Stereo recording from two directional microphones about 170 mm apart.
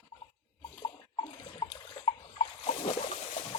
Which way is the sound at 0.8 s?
30° left (ahead or behind).